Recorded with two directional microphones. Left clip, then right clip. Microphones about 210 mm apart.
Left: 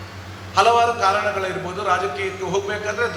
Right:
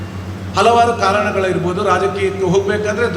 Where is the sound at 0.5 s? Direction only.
50° right (ahead or behind).